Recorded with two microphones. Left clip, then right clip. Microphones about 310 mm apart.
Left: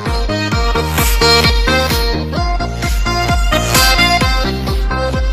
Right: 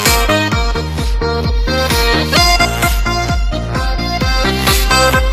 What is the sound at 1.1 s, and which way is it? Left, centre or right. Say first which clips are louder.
Music: left 7 dB; left.